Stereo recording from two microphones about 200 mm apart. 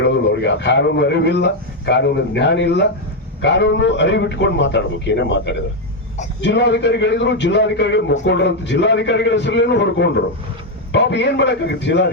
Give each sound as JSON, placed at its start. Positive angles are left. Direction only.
{"t": 0.0, "sound": "a man's voice", "side_deg": 60}